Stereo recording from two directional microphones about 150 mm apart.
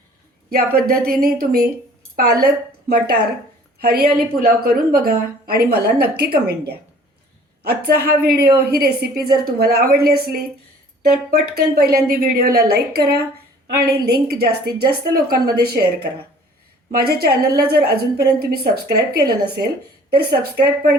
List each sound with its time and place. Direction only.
0.5 s a woman's voice: 80° right
12.0 s a woman's voice: 75° right (ahead or behind); by 20.4 s 90° right